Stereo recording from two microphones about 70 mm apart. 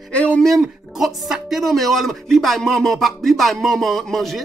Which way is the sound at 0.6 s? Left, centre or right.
Centre.